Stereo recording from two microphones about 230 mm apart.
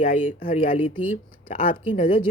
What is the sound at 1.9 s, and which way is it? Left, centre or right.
Speech, left.